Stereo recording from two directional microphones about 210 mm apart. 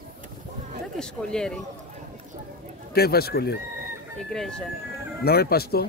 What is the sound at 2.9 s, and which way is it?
Speech, 50° left (ahead or behind).